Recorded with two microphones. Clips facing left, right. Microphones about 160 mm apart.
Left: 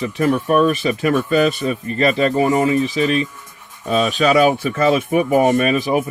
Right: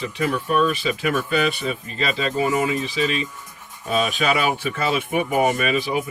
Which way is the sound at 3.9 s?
40° left (ahead or behind).